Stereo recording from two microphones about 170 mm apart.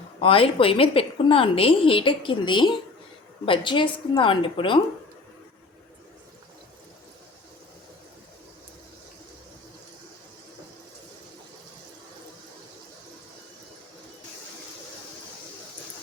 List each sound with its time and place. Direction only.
0.2 s a woman's voice: 30° left (ahead or behind)